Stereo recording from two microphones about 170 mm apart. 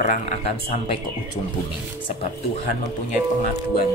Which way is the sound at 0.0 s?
45° left (ahead or behind).